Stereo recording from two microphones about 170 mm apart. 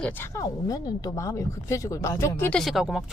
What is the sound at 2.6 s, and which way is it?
Speech, centre (ahead or behind).